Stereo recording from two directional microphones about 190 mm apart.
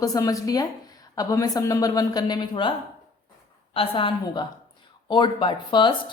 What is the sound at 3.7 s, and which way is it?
Speech, 30° left (ahead or behind).